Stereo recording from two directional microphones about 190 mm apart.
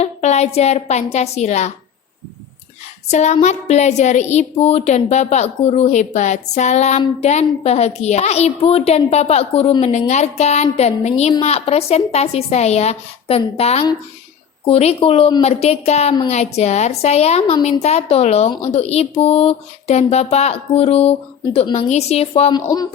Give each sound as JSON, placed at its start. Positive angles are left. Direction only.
{"t": 0.0, "sound": "a woman's voice", "side_deg": 35}
{"t": 3.1, "sound": "a woman's voice", "side_deg": 35}